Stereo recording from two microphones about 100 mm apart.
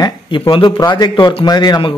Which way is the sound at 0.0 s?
55° left (ahead or behind).